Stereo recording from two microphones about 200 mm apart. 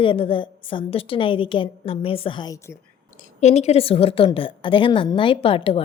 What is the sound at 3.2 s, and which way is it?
A woman's voice, 35° left (ahead or behind).